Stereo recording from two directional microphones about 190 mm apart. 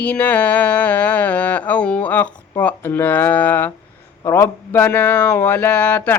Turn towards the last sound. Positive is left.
turn(degrees=10)  # may be behind; listen again after turning